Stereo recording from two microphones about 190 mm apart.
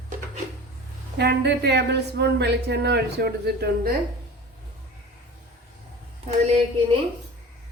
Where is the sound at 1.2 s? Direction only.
60° right (ahead or behind).